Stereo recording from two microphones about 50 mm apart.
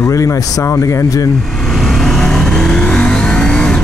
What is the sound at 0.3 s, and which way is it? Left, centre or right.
Speech, left.